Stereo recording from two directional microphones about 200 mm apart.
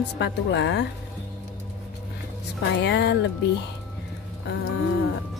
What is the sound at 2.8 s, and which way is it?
Speech, 55° left (ahead or behind).